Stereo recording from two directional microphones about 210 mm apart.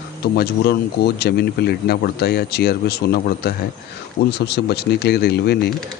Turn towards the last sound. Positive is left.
turn(degrees=50)  # may be behind; listen again after turning